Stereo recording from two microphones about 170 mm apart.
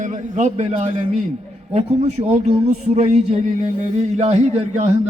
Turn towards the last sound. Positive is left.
turn(degrees=-40)  # may be behind; listen again after turning